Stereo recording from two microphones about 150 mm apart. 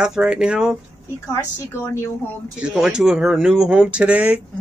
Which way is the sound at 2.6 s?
5° right (ahead or behind).